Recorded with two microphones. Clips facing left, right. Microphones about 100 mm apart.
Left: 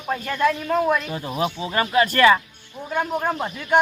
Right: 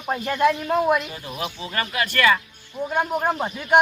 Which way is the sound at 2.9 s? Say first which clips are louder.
Even; 10° right (ahead or behind).